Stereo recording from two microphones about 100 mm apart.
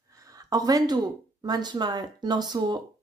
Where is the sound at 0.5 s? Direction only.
40° right (ahead or behind).